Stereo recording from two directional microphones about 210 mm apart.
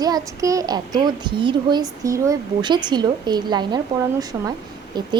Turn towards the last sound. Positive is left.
turn(degrees=-20)  # may be behind; listen again after turning